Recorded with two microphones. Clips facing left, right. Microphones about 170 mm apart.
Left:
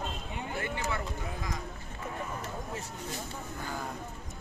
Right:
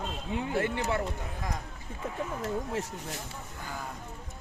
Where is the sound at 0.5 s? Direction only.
75° right (ahead or behind).